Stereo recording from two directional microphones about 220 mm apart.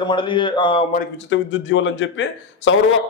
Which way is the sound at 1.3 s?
60° left (ahead or behind).